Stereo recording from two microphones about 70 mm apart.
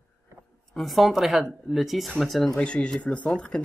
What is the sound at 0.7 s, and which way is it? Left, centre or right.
Speech, centre.